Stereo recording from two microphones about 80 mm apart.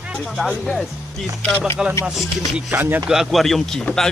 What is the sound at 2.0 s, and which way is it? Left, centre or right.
Speech, centre.